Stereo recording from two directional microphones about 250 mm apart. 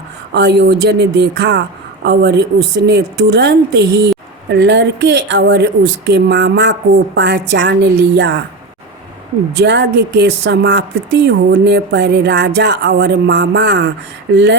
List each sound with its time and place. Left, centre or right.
0.3 s a woman's voice: right
9.6 s a woman's voice: right